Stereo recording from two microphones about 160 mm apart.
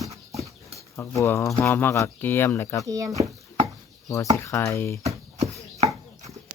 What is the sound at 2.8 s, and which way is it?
Speech, 20° right (ahead or behind).